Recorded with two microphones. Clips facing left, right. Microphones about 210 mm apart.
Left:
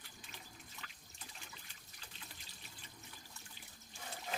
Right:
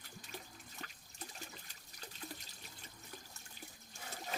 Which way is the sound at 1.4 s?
40° right (ahead or behind).